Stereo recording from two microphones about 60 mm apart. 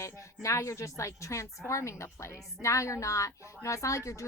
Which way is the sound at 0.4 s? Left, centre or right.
Left.